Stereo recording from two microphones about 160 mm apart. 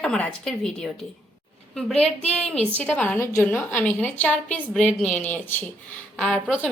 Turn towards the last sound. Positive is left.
turn(degrees=5)  # may be behind; listen again after turning